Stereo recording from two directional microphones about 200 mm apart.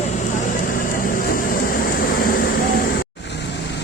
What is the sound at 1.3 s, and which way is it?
Vehicle, 45° left (ahead or behind).